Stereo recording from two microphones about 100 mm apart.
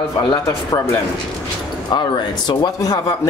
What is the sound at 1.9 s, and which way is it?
Speech, 45° left (ahead or behind).